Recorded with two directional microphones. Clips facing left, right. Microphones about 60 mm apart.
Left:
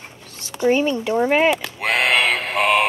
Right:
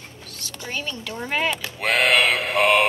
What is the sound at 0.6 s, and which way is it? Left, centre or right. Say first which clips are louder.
Speech: left 14 dB; left.